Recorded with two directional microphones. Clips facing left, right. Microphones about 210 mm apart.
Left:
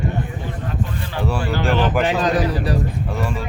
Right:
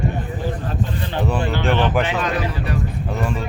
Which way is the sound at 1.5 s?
40° left (ahead or behind).